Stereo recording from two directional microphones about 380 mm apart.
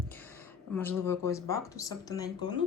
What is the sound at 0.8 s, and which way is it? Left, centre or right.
Speech, centre.